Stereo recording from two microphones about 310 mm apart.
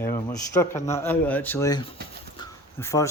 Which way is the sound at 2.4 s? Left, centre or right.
Centre.